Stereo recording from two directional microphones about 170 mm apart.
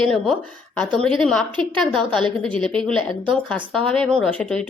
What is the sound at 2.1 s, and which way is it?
Speech, 5° left (ahead or behind).